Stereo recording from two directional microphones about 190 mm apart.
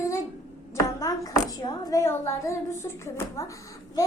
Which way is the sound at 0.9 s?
15° left (ahead or behind).